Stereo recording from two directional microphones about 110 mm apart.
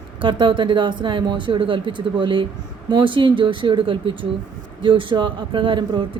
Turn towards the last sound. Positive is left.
turn(degrees=-50)  # may be behind; listen again after turning